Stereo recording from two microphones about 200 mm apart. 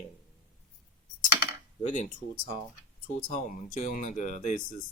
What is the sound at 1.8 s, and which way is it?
Speech, 40° left (ahead or behind).